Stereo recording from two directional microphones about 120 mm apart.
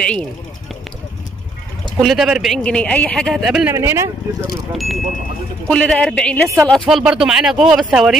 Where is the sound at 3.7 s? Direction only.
25° right (ahead or behind).